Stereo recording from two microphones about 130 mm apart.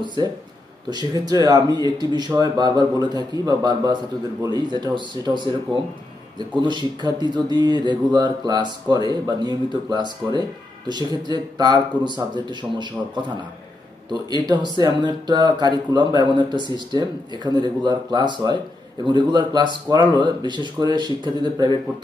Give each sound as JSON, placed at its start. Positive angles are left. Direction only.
{"t": 0.8, "sound": "speech", "side_deg": -30}